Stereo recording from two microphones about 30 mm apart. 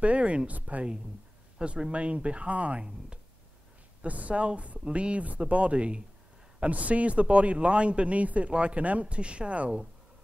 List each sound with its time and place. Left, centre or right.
0.0 s speech: right
1.6 s speech: right
4.0 s speech: right
6.6 s speech: right
8.5 s speech: right
9.0 s speech: right